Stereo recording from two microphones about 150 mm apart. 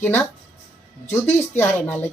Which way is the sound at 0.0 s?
15° left (ahead or behind).